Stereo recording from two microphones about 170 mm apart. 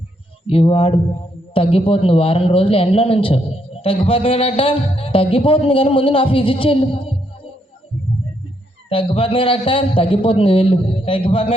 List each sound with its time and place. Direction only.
0.4 s a man's voice: 35° left (ahead or behind)
8.9 s a man's voice: 30° left (ahead or behind)